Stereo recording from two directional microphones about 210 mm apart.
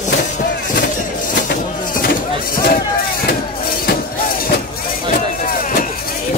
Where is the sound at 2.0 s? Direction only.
45° left (ahead or behind).